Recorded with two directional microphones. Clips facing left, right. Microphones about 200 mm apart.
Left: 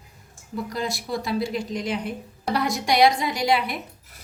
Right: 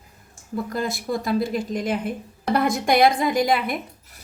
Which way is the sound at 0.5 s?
50° right (ahead or behind).